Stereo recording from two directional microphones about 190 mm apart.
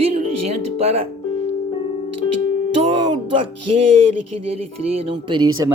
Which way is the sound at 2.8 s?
35° right (ahead or behind).